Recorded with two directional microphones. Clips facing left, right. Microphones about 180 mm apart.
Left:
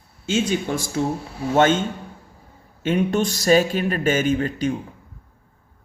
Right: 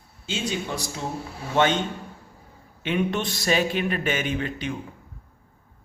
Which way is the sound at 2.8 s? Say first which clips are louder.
Left 5 dB; 45° left (ahead or behind).